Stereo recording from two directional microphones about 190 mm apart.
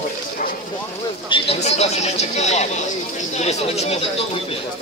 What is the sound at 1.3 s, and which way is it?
Speech, 30° left (ahead or behind).